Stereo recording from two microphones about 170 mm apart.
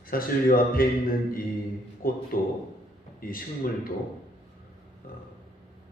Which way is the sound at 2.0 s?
60° left (ahead or behind).